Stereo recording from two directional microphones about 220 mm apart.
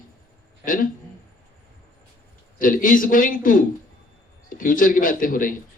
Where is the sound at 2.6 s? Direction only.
40° left (ahead or behind).